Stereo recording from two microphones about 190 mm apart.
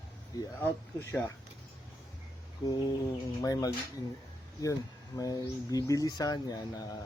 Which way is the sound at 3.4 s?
20° left (ahead or behind).